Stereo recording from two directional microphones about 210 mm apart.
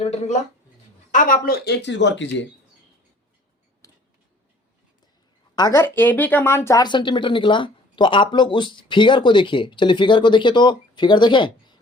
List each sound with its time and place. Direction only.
0.0 s a woman's voice: 30° left (ahead or behind); by 2.5 s 60° left (ahead or behind)
3.8 s tick-tock: 15° left (ahead or behind)
5.5 s speech: 15° left (ahead or behind)